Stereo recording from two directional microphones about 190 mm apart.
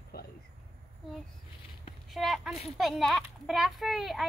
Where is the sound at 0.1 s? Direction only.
55° left (ahead or behind).